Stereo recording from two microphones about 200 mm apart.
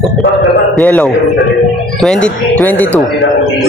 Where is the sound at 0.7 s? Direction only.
5° left (ahead or behind).